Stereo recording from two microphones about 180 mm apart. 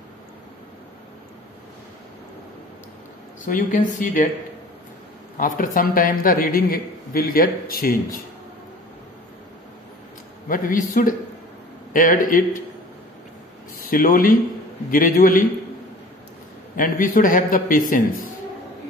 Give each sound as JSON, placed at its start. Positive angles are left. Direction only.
{"t": 3.4, "sound": "a man's voice", "side_deg": 45}
{"t": 5.4, "sound": "a man's voice", "side_deg": 45}
{"t": 10.5, "sound": "a man's voice", "side_deg": 50}
{"t": 13.7, "sound": "a man's voice", "side_deg": 55}
{"t": 16.7, "sound": "a man's voice", "side_deg": 50}